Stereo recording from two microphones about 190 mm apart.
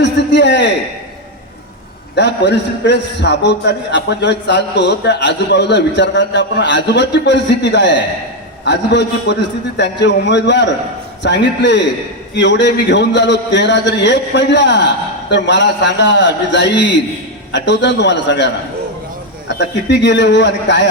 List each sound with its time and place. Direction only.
0.0 s a sound: 65° left (ahead or behind)
2.1 s a man's voice: 65° left (ahead or behind)
19.5 s a man's voice: 65° left (ahead or behind)